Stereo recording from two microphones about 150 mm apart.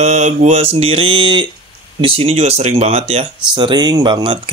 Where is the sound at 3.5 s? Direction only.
30° right (ahead or behind).